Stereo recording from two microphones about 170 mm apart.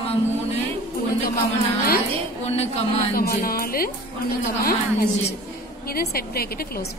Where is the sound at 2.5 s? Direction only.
35° left (ahead or behind).